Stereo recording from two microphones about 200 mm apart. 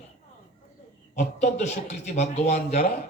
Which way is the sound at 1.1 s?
35° left (ahead or behind).